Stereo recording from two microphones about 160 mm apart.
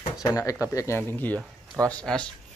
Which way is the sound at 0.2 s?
20° left (ahead or behind).